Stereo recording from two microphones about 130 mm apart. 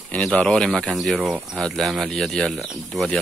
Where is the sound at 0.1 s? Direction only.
10° left (ahead or behind).